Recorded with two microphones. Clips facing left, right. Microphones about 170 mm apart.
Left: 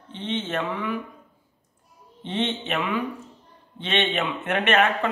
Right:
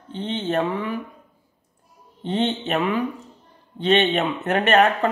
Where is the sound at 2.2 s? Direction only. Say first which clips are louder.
Right 4 dB; 35° right (ahead or behind).